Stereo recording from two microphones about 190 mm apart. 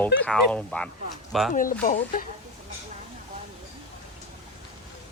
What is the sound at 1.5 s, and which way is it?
Speech, 45° left (ahead or behind).